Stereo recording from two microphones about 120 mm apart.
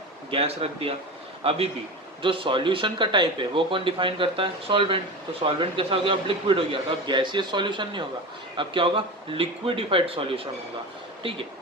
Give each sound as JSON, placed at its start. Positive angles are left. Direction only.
{"t": 0.3, "sound": "speech", "side_deg": -55}